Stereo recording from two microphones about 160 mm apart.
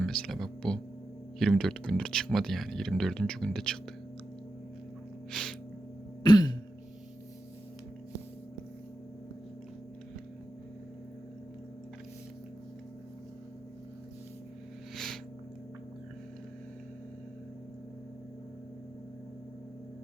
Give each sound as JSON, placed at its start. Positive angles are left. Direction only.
{"t": 0.0, "sound": "speech", "side_deg": 0}
{"t": 5.3, "sound": "music", "side_deg": 5}
{"t": 6.2, "sound": "throat clearing", "side_deg": 30}
{"t": 14.9, "sound": "a sound", "side_deg": 0}